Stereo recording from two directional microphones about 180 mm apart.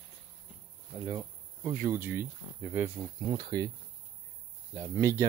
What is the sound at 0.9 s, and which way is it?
Cricket, 15° right (ahead or behind).